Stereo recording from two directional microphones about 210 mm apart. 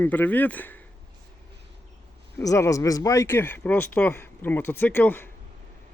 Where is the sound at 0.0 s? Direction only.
10° left (ahead or behind).